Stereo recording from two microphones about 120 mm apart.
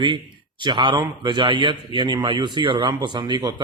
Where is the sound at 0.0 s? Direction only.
40° right (ahead or behind).